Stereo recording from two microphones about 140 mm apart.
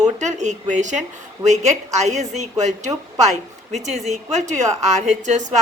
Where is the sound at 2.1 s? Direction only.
55° right (ahead or behind).